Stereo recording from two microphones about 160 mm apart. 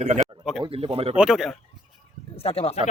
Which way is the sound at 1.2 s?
Centre (ahead or behind).